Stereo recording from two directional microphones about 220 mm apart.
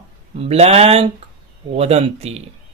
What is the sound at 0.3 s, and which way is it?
Speech, 30° right (ahead or behind).